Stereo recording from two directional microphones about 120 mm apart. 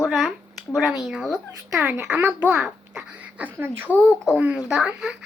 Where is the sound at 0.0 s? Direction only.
Centre (ahead or behind).